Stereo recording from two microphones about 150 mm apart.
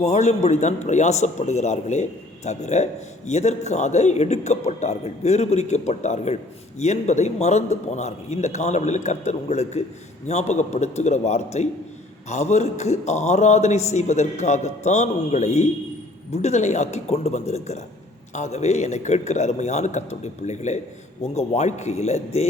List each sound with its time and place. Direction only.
0.0 s a man's voice: 50° left (ahead or behind)